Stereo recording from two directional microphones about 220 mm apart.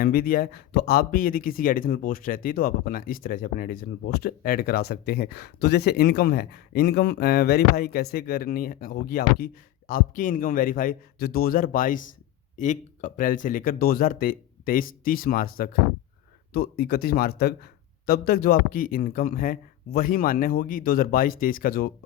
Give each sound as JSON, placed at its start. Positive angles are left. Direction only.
{"t": 0.0, "sound": "speech", "side_deg": 40}